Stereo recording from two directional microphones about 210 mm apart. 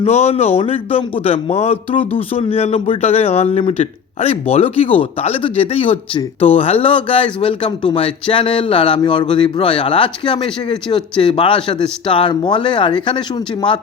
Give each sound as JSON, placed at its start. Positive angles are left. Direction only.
{"t": 0.0, "sound": "speech", "side_deg": 30}